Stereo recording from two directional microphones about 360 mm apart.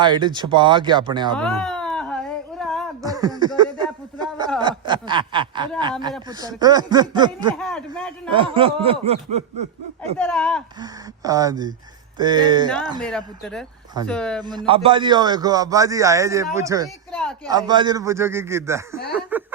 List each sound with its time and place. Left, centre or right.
0.0 s a man's voice: centre
1.4 s a sound: centre
3.0 s a man's voice: centre
7.5 s speech: centre
8.3 s a man's voice: centre
10.2 s speech: centre
10.8 s a man's voice: centre
13.0 s speech: centre
14.7 s a man's voice: centre
17.1 s speech: centre
17.5 s a man's voice: centre